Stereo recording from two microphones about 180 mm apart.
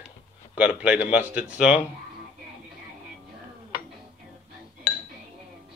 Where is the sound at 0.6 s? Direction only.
5° right (ahead or behind).